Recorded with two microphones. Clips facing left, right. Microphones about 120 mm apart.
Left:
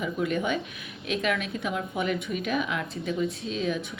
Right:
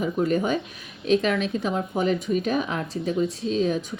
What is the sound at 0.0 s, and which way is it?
A woman's voice, 40° right (ahead or behind).